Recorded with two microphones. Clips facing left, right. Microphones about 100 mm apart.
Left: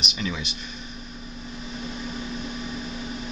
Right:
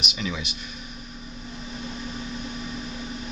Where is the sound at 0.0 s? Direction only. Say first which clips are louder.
Even; centre (ahead or behind).